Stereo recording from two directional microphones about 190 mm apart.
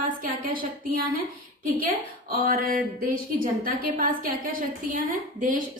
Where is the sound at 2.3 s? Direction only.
50° right (ahead or behind).